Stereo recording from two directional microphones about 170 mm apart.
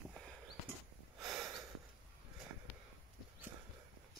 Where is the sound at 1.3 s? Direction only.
20° right (ahead or behind).